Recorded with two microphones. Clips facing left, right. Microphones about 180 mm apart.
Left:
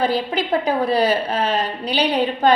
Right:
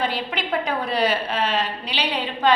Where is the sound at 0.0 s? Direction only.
35° left (ahead or behind).